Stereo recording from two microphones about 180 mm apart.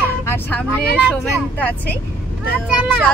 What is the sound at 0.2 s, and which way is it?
Vehicle, 10° left (ahead or behind).